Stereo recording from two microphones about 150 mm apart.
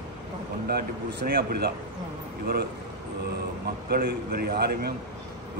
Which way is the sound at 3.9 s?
90° right.